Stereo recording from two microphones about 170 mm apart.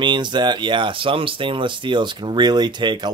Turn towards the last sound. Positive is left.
turn(degrees=-25)  # may be behind; listen again after turning